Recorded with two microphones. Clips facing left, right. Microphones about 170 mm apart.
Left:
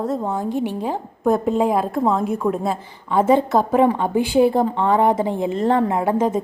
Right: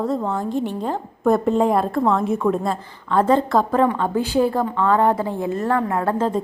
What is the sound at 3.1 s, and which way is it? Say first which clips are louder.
A woman's voice: left 1 dB; 15° left (ahead or behind).